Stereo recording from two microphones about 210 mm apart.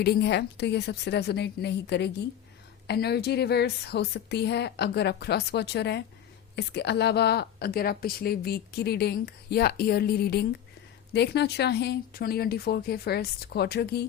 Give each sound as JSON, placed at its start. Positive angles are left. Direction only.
{"t": 0.0, "sound": "a woman's voice", "side_deg": 50}